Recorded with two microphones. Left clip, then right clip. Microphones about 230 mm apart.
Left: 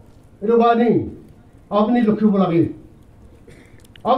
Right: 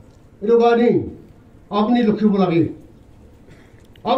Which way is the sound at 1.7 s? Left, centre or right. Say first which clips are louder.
Left 1 dB; right.